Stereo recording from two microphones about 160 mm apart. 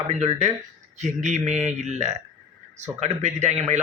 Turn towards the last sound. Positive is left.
turn(degrees=-45)  # may be behind; listen again after turning